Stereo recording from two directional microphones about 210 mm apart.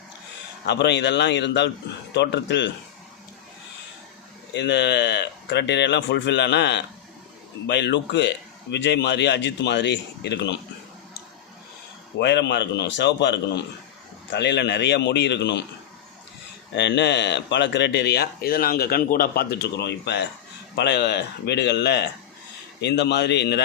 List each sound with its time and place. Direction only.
0.6 s a man's voice: 55° left (ahead or behind)
4.5 s a man's voice: 55° left (ahead or behind)
12.2 s a man's voice: 55° left (ahead or behind)
16.7 s speech: 55° left (ahead or behind)